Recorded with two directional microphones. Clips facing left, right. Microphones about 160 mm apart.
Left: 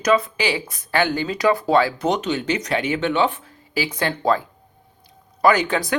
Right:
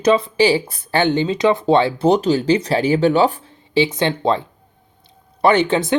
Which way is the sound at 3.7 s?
25° right (ahead or behind).